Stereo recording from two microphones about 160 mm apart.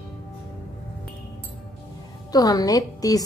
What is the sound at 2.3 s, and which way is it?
Speech, 25° left (ahead or behind).